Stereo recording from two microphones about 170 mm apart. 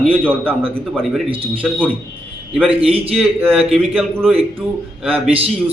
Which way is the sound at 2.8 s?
35° right (ahead or behind).